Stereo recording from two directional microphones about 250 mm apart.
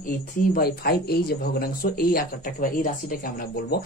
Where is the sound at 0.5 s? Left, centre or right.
Left.